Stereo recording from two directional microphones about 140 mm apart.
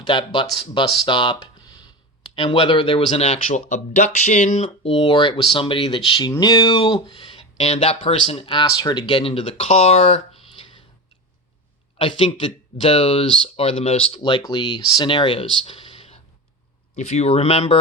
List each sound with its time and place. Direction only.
0.0 s speech: 35° left (ahead or behind)
1.0 s a sound: 35° left (ahead or behind)
2.3 s speech: 40° left (ahead or behind)
11.9 s speech: 35° left (ahead or behind)
16.9 s speech: 55° left (ahead or behind)